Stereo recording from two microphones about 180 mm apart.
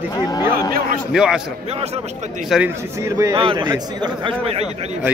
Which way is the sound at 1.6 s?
35° right (ahead or behind).